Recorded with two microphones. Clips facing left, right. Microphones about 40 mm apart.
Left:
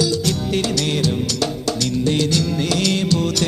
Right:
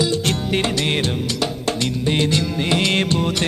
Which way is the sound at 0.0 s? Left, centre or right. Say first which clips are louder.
Even; right.